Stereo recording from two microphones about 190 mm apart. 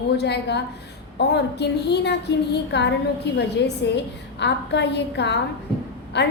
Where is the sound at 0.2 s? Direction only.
60° left (ahead or behind).